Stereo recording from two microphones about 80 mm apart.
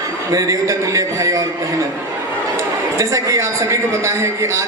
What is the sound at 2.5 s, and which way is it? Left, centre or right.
A man's voice, right.